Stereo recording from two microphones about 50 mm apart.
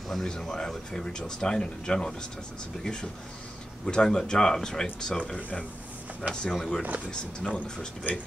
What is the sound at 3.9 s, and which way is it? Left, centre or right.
Speech, centre.